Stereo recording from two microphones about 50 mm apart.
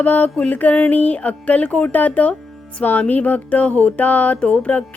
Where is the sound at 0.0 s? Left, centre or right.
Left.